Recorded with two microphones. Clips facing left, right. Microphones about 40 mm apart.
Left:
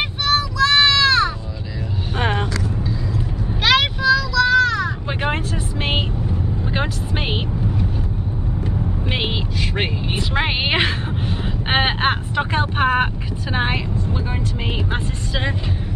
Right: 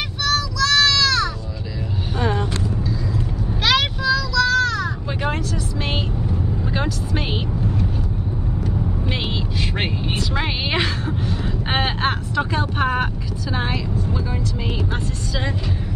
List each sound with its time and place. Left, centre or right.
0.2 s child singing: left
2.1 s vehicle: left
3.6 s child singing: centre
4.5 s a sound: centre
6.7 s vehicle: left
10.1 s a sound: left